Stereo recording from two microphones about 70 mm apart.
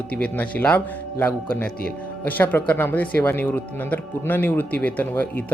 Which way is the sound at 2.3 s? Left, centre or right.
Left.